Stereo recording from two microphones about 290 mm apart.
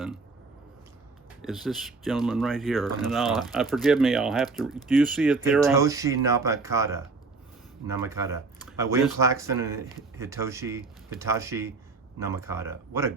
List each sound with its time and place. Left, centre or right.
1.4 s speech: centre